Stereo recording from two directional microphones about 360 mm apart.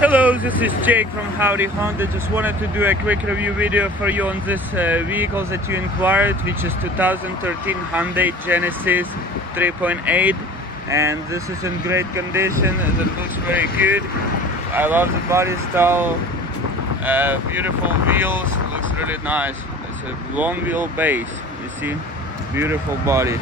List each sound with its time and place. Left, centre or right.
0.0 s speech: centre
22.6 s speech: centre